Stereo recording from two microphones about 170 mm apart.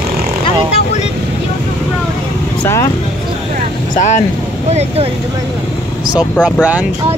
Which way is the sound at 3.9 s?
45° left (ahead or behind).